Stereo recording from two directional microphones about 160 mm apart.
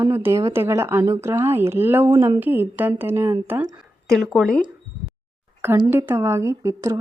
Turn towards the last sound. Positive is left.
turn(degrees=-20)  # may be behind; listen again after turning